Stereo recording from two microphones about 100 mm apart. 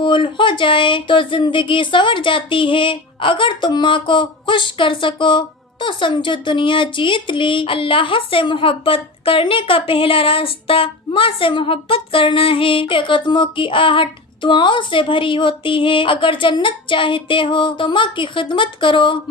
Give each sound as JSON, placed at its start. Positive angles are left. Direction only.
{"t": 0.0, "sound": "speech", "side_deg": 55}